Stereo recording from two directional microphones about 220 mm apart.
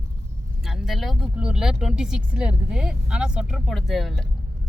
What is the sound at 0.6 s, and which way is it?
Speech, centre (ahead or behind).